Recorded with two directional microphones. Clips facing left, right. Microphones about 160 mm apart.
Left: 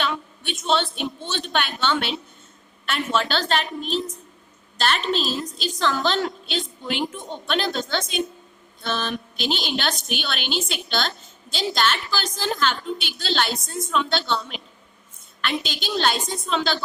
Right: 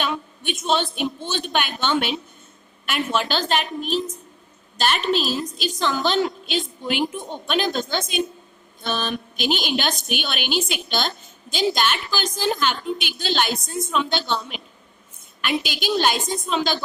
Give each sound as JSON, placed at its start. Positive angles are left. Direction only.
{"t": 0.0, "sound": "a sound", "side_deg": -15}
{"t": 0.6, "sound": "a woman's voice", "side_deg": -10}
{"t": 4.9, "sound": "a woman's voice", "side_deg": 25}
{"t": 5.8, "sound": "a woman's voice", "side_deg": -5}